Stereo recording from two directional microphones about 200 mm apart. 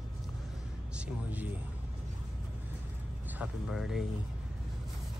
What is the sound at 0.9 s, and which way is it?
Speech, 5° right (ahead or behind).